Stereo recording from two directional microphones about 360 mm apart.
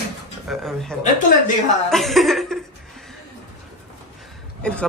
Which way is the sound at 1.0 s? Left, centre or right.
Left.